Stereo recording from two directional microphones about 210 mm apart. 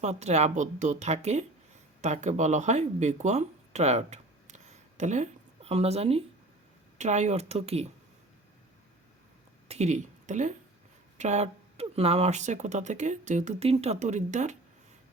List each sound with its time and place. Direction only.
0.0 s speech: 30° right (ahead or behind)
9.6 s speech: 30° right (ahead or behind)